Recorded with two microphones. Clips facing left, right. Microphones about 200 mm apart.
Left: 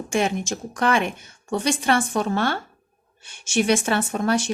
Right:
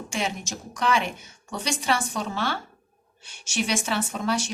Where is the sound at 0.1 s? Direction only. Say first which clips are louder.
Left 8 dB; 55° left (ahead or behind).